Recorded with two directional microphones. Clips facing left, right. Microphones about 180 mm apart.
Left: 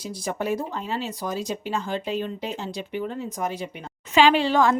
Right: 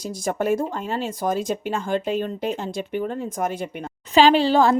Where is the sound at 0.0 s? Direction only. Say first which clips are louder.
Right 4 dB; 45° right (ahead or behind).